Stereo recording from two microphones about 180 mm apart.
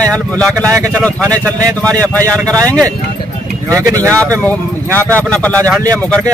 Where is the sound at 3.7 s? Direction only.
15° right (ahead or behind).